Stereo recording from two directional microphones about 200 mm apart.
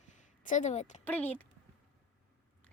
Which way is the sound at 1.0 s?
10° left (ahead or behind).